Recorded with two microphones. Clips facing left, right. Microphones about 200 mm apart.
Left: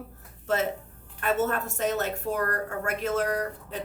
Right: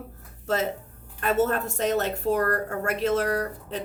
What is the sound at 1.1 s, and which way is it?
A woman's voice, 35° right (ahead or behind).